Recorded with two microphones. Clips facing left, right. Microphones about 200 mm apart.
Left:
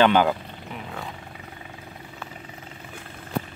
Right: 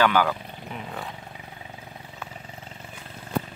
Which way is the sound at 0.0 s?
20° left (ahead or behind).